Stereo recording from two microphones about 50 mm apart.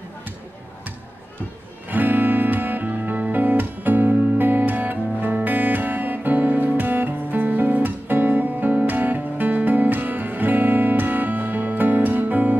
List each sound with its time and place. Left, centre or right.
1.9 s music: right